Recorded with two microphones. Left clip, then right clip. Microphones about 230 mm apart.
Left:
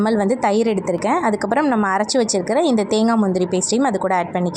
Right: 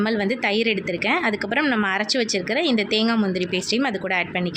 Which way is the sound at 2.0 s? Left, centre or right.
Centre.